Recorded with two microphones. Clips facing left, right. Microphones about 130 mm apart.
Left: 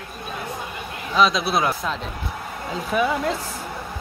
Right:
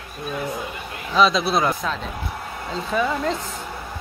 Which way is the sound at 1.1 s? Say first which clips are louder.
Right 1 dB; centre (ahead or behind).